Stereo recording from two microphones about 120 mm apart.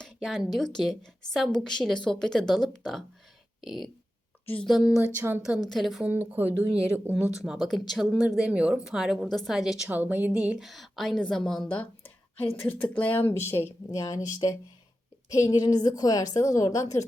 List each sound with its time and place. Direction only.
0.0 s speech: centre (ahead or behind)
3.6 s a sound: centre (ahead or behind)
4.4 s speech: 5° left (ahead or behind)
4.8 s speech: 10° right (ahead or behind)
5.1 s a woman's voice: 20° right (ahead or behind)
5.6 s speech: centre (ahead or behind)
6.1 s speech: 15° right (ahead or behind)
9.9 s speech: 15° right (ahead or behind); by 14.0 s 20° left (ahead or behind)
15.3 s a woman's voice: 30° left (ahead or behind)